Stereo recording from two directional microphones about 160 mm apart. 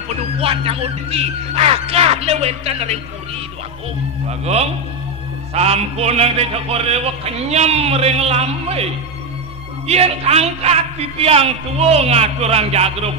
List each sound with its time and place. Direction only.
0.1 s a man's voice: 35° right (ahead or behind)
5.5 s a man's voice: 40° right (ahead or behind)
9.8 s a man's voice: 40° right (ahead or behind)